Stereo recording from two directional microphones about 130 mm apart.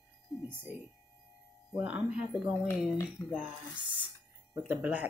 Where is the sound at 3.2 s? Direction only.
25° left (ahead or behind).